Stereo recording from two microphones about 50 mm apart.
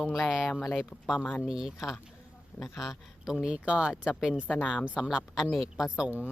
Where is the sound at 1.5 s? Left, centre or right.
Centre.